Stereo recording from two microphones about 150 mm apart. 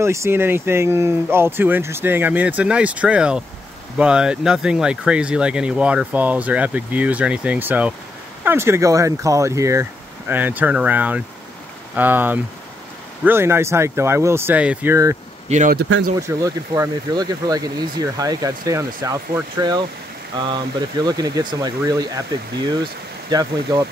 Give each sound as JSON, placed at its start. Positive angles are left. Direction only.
{"t": 0.0, "sound": "speech", "side_deg": -20}
{"t": 15.4, "sound": "speech", "side_deg": -50}
{"t": 15.7, "sound": "speech", "side_deg": -90}
{"t": 16.2, "sound": "speech", "side_deg": -20}